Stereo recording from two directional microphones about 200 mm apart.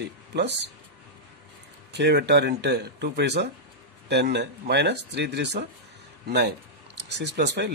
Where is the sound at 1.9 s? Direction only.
55° right (ahead or behind).